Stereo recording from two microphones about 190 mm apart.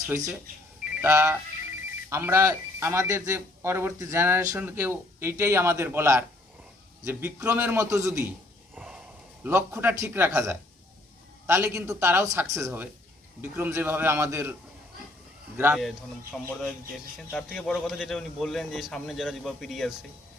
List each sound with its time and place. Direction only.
0.1 s a man's voice: 15° right (ahead or behind)
15.5 s speech: 10° right (ahead or behind)
15.8 s a man's voice: centre (ahead or behind)